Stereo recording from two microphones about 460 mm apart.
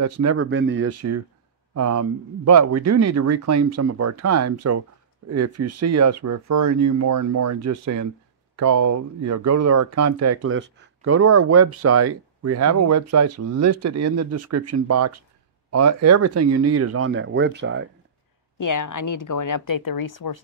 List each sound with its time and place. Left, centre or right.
0.0 s speech: right
18.6 s speech: left